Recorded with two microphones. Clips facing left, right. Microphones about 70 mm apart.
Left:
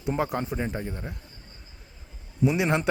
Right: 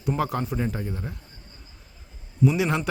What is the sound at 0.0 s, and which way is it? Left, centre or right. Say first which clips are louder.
Speech: right 1 dB; centre.